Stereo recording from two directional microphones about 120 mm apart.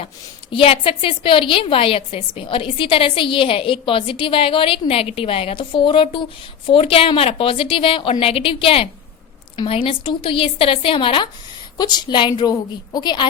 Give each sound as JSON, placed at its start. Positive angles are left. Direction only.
{"t": 0.5, "sound": "a woman's voice", "side_deg": 50}